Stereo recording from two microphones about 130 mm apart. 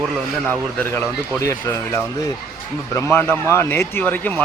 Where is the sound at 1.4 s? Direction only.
20° left (ahead or behind).